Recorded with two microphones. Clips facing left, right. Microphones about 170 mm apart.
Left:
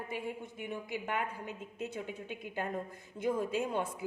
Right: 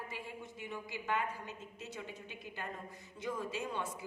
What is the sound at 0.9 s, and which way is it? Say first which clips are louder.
A woman's voice: even; 55° left (ahead or behind).